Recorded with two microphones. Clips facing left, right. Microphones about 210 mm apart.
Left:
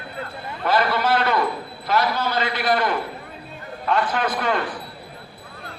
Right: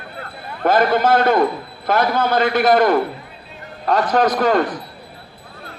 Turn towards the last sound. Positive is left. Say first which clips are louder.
# right 7 dB
turn(degrees=-40)  # may be behind; listen again after turning